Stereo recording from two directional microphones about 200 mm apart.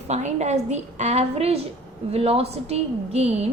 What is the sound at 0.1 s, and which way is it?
A woman's voice, 35° right (ahead or behind).